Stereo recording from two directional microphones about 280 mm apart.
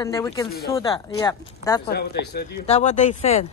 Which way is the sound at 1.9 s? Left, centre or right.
Left.